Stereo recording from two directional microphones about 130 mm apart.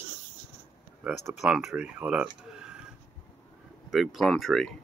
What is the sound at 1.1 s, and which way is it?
Speech, 5° right (ahead or behind).